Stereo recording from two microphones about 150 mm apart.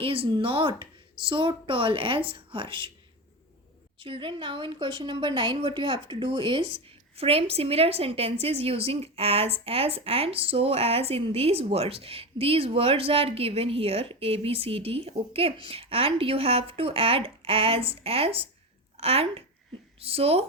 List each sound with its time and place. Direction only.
0.0 s a woman's voice: 35° right (ahead or behind)
4.0 s a woman's voice: 35° right (ahead or behind)